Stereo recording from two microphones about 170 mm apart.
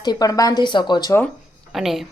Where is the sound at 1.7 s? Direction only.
Centre (ahead or behind).